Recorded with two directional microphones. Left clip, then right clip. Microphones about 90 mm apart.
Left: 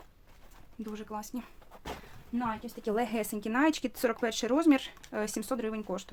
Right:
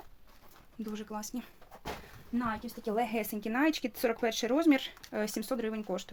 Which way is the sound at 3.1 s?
35° left (ahead or behind).